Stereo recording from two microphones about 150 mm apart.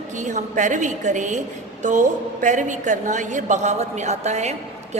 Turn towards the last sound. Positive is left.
turn(degrees=-50)  # may be behind; listen again after turning